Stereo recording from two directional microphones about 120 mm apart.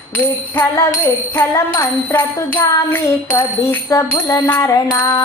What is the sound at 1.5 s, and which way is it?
Music, 25° left (ahead or behind).